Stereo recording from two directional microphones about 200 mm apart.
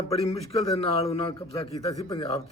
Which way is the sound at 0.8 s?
30° left (ahead or behind).